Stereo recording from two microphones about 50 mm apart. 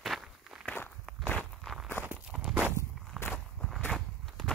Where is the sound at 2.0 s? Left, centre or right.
Left.